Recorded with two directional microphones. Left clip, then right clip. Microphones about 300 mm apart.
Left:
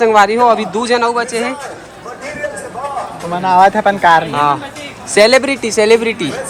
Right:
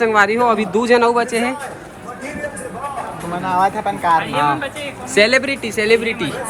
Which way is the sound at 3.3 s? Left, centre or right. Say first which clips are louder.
Left 8 dB; left.